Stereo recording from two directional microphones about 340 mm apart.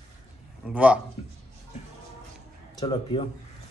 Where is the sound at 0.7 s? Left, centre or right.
Centre.